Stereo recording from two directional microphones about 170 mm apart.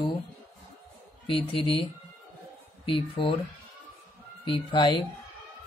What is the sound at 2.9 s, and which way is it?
Speech, 30° left (ahead or behind).